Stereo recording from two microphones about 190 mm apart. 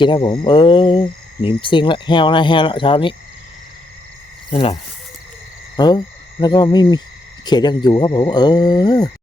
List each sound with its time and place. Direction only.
0.0 s speech: 25° left (ahead or behind)
4.5 s speech: 30° left (ahead or behind)
5.7 s owl: 20° left (ahead or behind)
6.4 s speech: 25° left (ahead or behind)